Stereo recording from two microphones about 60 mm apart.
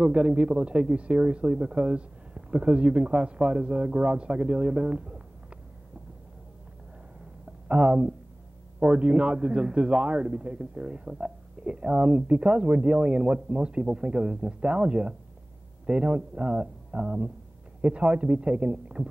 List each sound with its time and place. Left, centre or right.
0.0 s a man's voice: centre
7.6 s a man's voice: centre